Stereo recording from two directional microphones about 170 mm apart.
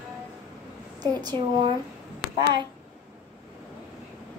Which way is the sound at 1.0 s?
25° right (ahead or behind).